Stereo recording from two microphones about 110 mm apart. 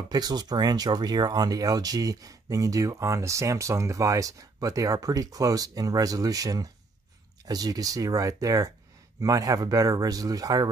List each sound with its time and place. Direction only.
0.1 s speech: 40° right (ahead or behind)